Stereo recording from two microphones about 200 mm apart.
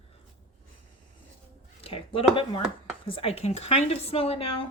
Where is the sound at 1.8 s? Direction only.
25° left (ahead or behind).